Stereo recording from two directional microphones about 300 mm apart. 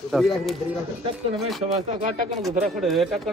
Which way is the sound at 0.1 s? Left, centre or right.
Centre.